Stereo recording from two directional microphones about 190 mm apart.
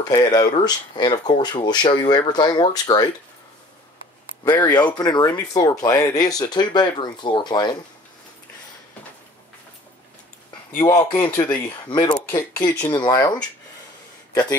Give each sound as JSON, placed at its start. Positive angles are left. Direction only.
{"t": 0.0, "sound": "speech", "side_deg": 20}
{"t": 4.9, "sound": "speech", "side_deg": 20}
{"t": 10.8, "sound": "speech", "side_deg": 20}